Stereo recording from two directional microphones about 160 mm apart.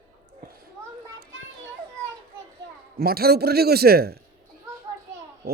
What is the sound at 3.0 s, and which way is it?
A man's voice, 75° right (ahead or behind).